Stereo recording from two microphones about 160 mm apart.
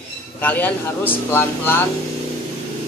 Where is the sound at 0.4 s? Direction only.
10° left (ahead or behind).